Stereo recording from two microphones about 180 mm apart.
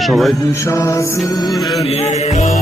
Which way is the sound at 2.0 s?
35° left (ahead or behind).